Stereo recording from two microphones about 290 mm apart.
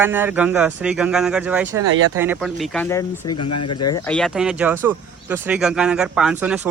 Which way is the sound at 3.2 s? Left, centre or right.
Left.